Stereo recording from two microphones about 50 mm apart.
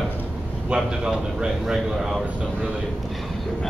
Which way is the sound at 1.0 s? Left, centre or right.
Centre.